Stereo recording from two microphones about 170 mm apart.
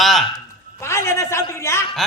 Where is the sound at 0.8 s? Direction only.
15° left (ahead or behind).